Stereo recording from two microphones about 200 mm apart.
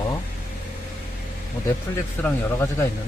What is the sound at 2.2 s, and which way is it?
Speech, 10° left (ahead or behind).